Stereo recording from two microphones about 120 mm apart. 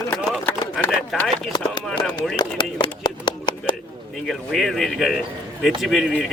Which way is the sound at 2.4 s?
40° left (ahead or behind).